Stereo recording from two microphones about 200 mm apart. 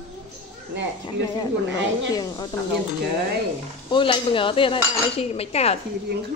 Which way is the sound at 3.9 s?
25° left (ahead or behind).